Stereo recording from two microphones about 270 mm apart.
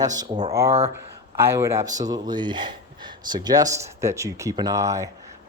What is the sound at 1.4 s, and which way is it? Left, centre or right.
Speech, centre.